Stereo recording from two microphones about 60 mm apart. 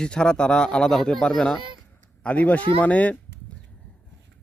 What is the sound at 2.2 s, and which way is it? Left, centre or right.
Speech, left.